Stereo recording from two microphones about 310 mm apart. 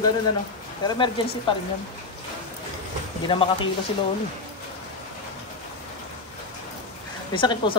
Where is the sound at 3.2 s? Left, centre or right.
Centre.